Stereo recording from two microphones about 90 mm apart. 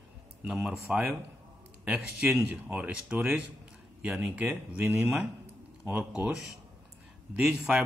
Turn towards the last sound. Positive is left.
turn(degrees=-5)  # may be behind; listen again after turning